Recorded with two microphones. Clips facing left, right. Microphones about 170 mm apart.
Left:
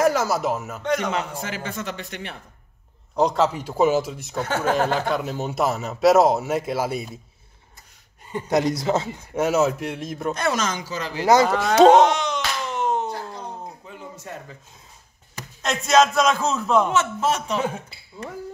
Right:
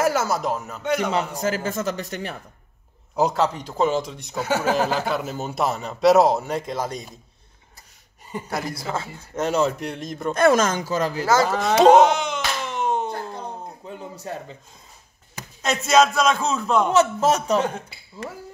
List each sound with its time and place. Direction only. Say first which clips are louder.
0.0 s speech: left 1 dB; centre (ahead or behind)
0.8 s a man's voice: right 1 dB; 10° right (ahead or behind)
1.4 s speech: right 6 dB; 40° right (ahead or behind)
3.2 s speech: left 1 dB; 5° right (ahead or behind)
8.5 s speech: left 9 dB; 20° left (ahead or behind)
9.4 s speech: left 2 dB; 5° left (ahead or behind)
10.3 s speech: right 9 dB; 50° right (ahead or behind)
11.2 s speech: left 5 dB; 20° left (ahead or behind)
11.6 s a sound: right 1 dB; centre (ahead or behind)
13.8 s a sound: right 4 dB; 35° right (ahead or behind)
15.6 s speech: even; centre (ahead or behind)
16.9 s speech: right 4 dB; 40° right (ahead or behind)
17.6 s speech: right 2 dB; 5° left (ahead or behind)